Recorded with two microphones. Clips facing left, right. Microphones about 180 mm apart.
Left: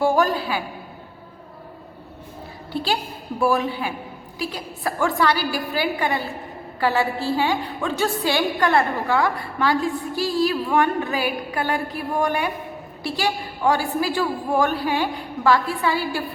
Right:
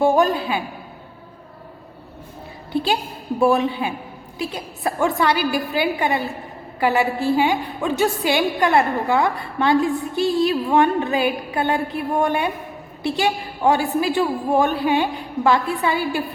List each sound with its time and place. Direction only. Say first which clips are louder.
0.0 s a woman's voice: right 3 dB; 20° right (ahead or behind)
2.7 s a woman's voice: right 3 dB; 20° right (ahead or behind)